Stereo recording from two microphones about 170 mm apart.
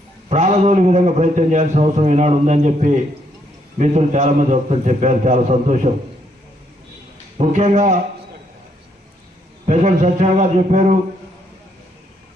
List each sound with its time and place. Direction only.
0.3 s a man's voice: 40° right (ahead or behind)
7.3 s a man's voice: 40° right (ahead or behind)
9.6 s a man's voice: 45° right (ahead or behind)